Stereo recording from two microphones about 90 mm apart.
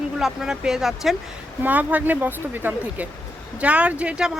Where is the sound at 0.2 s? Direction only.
5° right (ahead or behind).